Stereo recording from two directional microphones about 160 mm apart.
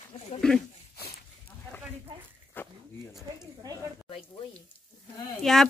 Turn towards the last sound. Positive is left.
turn(degrees=0)  # may be behind; listen again after turning